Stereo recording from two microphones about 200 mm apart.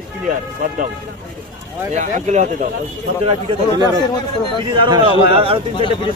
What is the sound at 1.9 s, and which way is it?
Speech, 35° right (ahead or behind).